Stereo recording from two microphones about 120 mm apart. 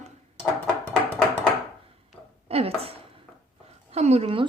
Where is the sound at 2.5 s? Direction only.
55° right (ahead or behind).